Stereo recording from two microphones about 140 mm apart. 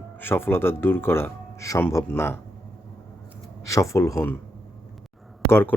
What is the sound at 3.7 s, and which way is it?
Speech, 20° left (ahead or behind).